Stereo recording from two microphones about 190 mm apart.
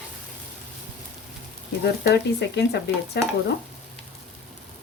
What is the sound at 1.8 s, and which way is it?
Speech, 60° left (ahead or behind).